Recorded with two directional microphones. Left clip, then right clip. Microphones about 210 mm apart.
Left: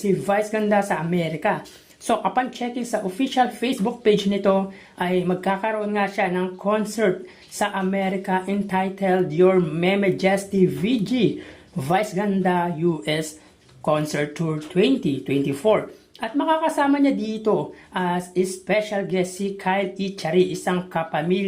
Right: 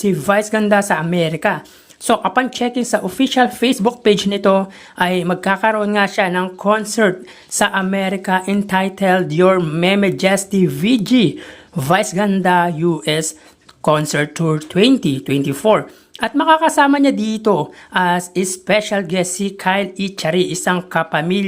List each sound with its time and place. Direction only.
0.0 s speech: 25° right (ahead or behind)